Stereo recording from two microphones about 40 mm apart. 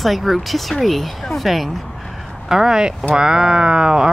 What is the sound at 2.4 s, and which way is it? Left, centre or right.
Speech, centre.